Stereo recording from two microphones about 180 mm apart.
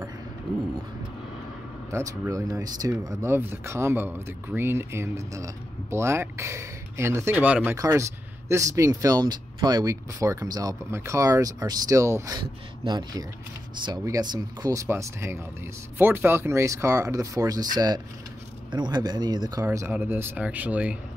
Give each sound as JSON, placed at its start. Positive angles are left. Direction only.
{"t": 1.9, "sound": "speech", "side_deg": -15}